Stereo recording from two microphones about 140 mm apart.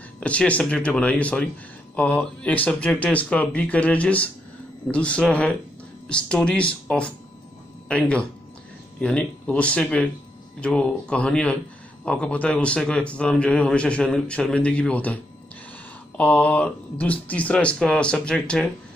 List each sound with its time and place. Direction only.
0.2 s a man's voice: 10° left (ahead or behind)
16.2 s a man's voice: 10° left (ahead or behind)